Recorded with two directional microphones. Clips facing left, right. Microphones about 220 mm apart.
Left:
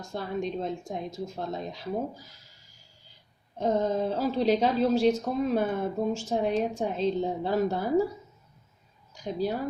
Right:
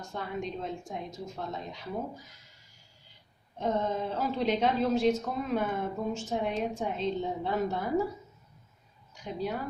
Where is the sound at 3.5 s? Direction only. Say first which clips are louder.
Left 4 dB; 35° left (ahead or behind).